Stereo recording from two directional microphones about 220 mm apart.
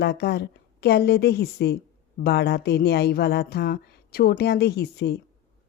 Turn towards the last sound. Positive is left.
turn(degrees=45)  # may be behind; listen again after turning